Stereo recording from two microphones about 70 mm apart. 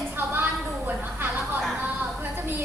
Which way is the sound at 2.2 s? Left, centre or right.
Right.